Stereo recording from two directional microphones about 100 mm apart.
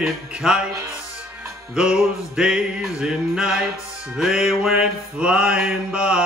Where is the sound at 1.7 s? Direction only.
5° right (ahead or behind).